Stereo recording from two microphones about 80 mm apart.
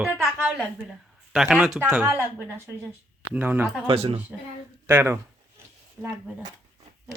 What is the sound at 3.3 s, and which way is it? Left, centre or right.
Speech, right.